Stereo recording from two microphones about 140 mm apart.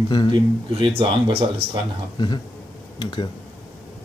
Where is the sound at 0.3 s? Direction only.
40° right (ahead or behind).